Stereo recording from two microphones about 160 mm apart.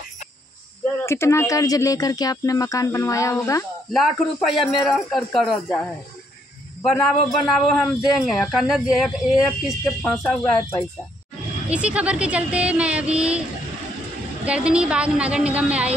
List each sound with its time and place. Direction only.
1.0 s speech: 15° left (ahead or behind)
3.9 s a man's voice: centre (ahead or behind)
6.8 s a man's voice: centre (ahead or behind)
11.7 s speech: 10° right (ahead or behind)
14.4 s speech: 5° right (ahead or behind)